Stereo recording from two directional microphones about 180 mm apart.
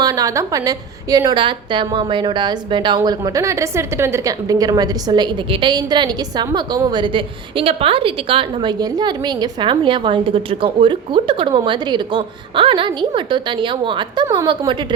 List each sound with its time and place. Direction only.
0.0 s a woman's voice: 20° right (ahead or behind)